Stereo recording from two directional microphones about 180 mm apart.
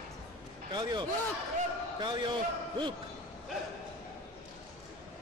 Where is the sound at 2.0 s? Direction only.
25° right (ahead or behind).